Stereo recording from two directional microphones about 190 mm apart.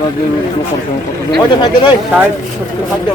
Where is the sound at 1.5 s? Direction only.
25° left (ahead or behind).